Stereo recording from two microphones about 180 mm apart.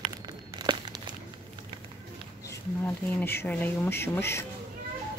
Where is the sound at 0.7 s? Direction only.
25° right (ahead or behind).